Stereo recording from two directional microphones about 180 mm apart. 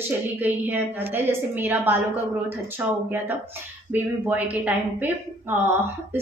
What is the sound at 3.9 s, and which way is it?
A woman's voice, 10° right (ahead or behind).